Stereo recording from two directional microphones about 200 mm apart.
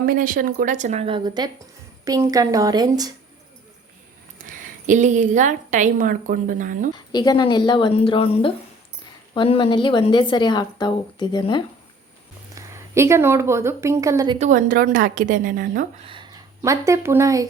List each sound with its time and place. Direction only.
0.0 s a woman's voice: 45° right (ahead or behind); by 3.1 s 20° right (ahead or behind)
4.4 s a woman's voice: 40° right (ahead or behind)
7.1 s a woman's voice: 20° left (ahead or behind)
12.5 s a woman's voice: 15° right (ahead or behind)
14.3 s a woman's voice: 40° right (ahead or behind)
16.0 s speech: 25° right (ahead or behind)